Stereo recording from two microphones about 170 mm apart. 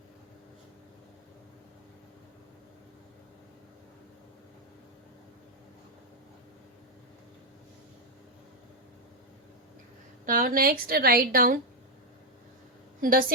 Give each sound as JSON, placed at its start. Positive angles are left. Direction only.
{"t": 10.2, "sound": "a woman's voice", "side_deg": -55}
{"t": 13.0, "sound": "a woman's voice", "side_deg": -55}